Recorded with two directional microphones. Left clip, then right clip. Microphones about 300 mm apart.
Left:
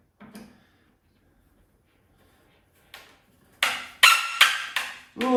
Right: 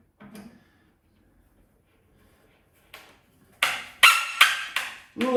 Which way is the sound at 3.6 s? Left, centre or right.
Centre.